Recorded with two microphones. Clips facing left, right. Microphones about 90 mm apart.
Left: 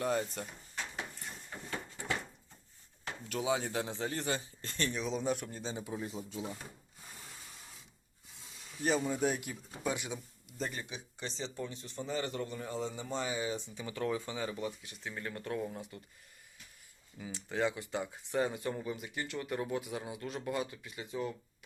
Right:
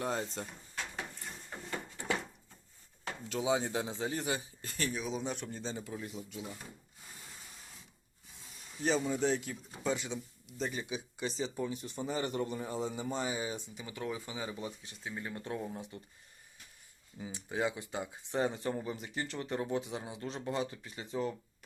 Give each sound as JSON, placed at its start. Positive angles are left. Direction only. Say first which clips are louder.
{"t": 0.0, "sound": "speech", "louder": "left 2 dB", "side_deg": -25}
{"t": 3.2, "sound": "speech", "louder": "right 1 dB", "side_deg": -20}
{"t": 4.8, "sound": "a man's voice", "louder": "left 1 dB", "side_deg": -5}
{"t": 5.7, "sound": "speech", "louder": "left 2 dB", "side_deg": 15}
{"t": 8.8, "sound": "speech", "louder": "even", "side_deg": 5}
{"t": 17.2, "sound": "speech", "louder": "left 1 dB", "side_deg": -20}